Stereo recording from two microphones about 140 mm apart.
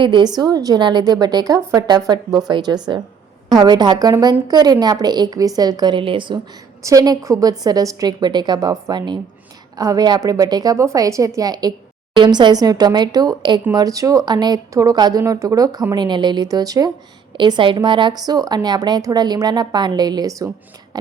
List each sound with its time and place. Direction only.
0.0 s a woman's voice: 35° right (ahead or behind)
20.9 s beatboxing: 30° right (ahead or behind)